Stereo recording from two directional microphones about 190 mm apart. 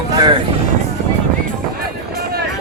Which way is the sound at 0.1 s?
25° right (ahead or behind).